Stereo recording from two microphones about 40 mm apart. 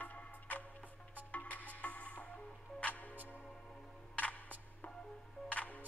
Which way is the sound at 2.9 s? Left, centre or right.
Left.